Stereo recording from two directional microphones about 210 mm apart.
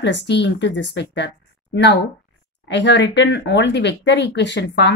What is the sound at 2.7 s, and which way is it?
A woman's voice, 55° left (ahead or behind).